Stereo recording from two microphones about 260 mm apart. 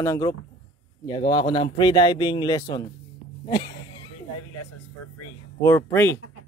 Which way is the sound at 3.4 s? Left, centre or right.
Centre.